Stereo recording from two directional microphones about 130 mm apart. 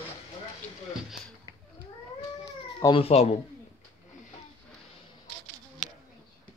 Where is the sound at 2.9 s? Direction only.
50° left (ahead or behind).